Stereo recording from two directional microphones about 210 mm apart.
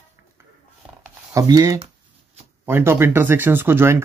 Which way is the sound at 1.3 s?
15° right (ahead or behind).